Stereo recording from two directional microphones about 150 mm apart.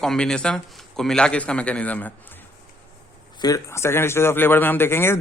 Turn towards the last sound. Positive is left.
turn(degrees=15)  # may be behind; listen again after turning